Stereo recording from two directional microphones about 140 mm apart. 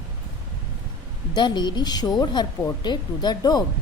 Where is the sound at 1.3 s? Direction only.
30° left (ahead or behind).